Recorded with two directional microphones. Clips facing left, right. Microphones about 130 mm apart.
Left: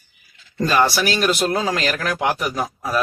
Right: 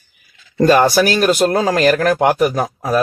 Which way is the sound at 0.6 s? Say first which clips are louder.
Right 7 dB; 50° right (ahead or behind).